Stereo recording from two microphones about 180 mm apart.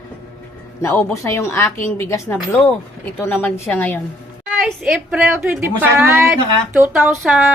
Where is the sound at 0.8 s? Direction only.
15° left (ahead or behind).